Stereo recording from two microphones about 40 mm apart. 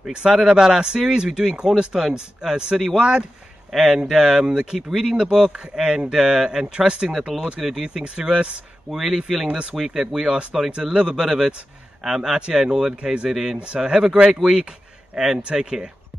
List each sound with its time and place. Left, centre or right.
0.1 s speech: centre
8.9 s speech: centre
9.5 s speech: right
9.8 s speech: centre
13.7 s speech: centre
14.4 s speech: right